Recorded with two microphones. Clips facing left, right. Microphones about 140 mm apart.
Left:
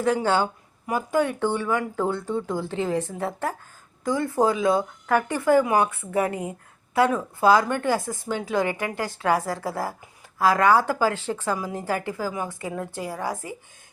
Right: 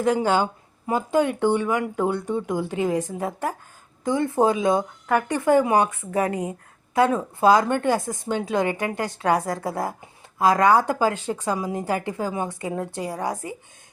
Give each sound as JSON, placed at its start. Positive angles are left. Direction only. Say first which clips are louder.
{"t": 0.0, "sound": "a woman's voice", "louder": "right 1 dB", "side_deg": -15}